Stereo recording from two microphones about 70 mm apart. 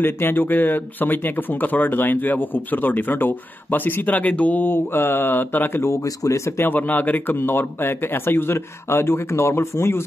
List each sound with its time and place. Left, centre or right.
0.0 s speech: left
6.6 s speech: left